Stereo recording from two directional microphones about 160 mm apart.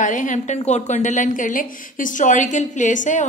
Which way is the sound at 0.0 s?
50° left (ahead or behind).